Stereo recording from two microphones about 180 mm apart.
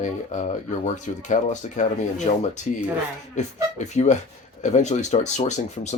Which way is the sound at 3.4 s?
40° left (ahead or behind).